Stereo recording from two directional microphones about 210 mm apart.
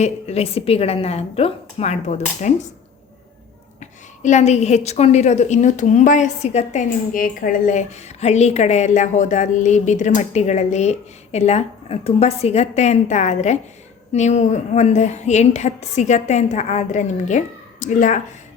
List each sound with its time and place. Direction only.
0.0 s a woman's voice: 30° left (ahead or behind)
3.8 s a woman's voice: 35° left (ahead or behind)